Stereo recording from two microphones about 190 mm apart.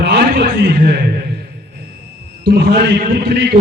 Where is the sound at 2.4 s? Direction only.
60° right (ahead or behind).